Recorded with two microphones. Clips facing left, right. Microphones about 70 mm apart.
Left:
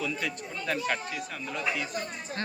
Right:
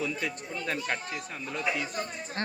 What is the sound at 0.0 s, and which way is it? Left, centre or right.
Speech, right.